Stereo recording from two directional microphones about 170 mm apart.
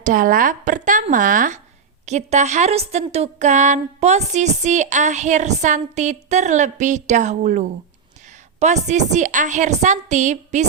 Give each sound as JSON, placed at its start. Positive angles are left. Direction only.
{"t": 0.0, "sound": "a woman's voice", "side_deg": -50}